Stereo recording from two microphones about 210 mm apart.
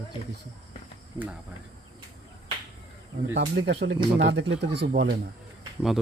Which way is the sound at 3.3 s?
50° right (ahead or behind).